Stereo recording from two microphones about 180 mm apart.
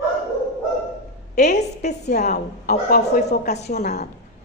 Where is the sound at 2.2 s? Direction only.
55° left (ahead or behind).